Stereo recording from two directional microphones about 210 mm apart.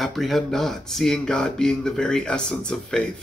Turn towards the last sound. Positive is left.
turn(degrees=5)  # may be behind; listen again after turning